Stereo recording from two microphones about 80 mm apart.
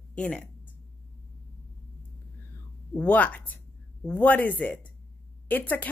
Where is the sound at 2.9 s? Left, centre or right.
Centre.